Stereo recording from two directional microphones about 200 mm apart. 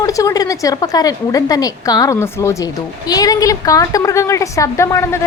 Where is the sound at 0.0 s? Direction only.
15° left (ahead or behind).